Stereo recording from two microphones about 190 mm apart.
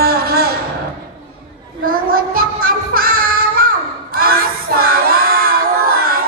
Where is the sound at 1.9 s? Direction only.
50° right (ahead or behind).